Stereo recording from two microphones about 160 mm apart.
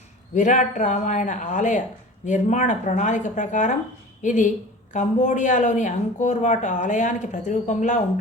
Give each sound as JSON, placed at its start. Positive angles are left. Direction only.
{"t": 0.3, "sound": "speech", "side_deg": 50}